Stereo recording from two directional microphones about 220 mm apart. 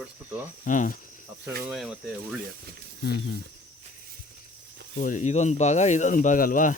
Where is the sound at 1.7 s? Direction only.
Centre (ahead or behind).